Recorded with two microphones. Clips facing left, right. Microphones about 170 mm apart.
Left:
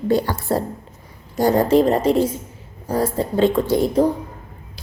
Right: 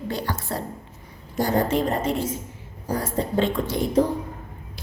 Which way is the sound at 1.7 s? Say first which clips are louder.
Left 8 dB; 35° left (ahead or behind).